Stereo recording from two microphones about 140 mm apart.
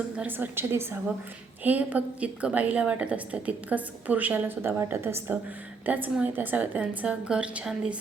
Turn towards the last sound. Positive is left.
turn(degrees=-10)  # may be behind; listen again after turning